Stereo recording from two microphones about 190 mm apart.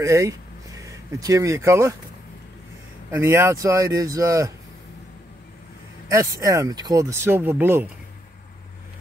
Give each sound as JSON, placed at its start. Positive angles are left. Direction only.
{"t": 0.0, "sound": "speech", "side_deg": -15}
{"t": 3.1, "sound": "speech", "side_deg": -15}
{"t": 6.0, "sound": "speech", "side_deg": -15}